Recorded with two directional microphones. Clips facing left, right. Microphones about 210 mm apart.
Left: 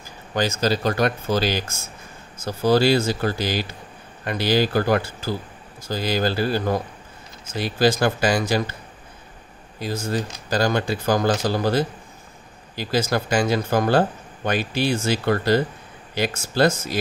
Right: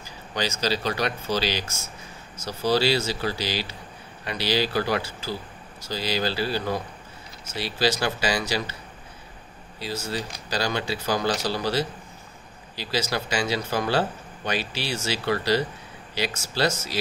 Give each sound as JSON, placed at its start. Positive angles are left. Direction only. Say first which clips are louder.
{"t": 0.3, "sound": "speech", "louder": "left 5 dB", "side_deg": 50}
{"t": 9.8, "sound": "speech", "louder": "left 5 dB", "side_deg": 50}